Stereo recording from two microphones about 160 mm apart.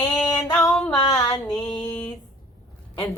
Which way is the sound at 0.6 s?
Centre (ahead or behind).